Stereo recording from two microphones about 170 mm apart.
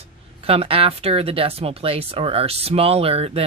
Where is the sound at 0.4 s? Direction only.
35° right (ahead or behind).